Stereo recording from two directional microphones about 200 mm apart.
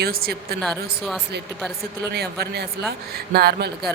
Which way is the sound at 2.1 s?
55° right (ahead or behind).